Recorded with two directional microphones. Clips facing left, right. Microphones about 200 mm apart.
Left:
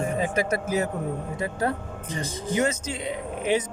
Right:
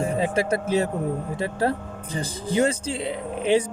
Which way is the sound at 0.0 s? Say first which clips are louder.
Right 2 dB; 30° right (ahead or behind).